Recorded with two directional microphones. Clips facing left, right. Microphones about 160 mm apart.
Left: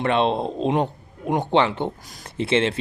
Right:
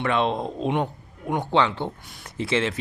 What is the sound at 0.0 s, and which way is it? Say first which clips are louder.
Speech: left 3 dB; 25° left (ahead or behind).